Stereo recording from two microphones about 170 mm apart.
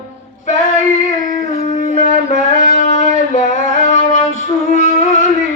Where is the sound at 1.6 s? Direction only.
40° left (ahead or behind).